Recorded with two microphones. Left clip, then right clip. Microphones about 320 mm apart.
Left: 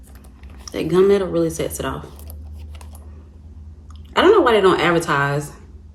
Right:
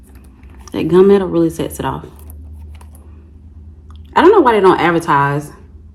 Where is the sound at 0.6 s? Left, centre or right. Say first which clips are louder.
Right 5 dB; centre.